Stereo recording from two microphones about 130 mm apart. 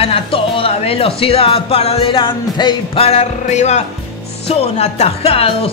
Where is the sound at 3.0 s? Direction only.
55° left (ahead or behind).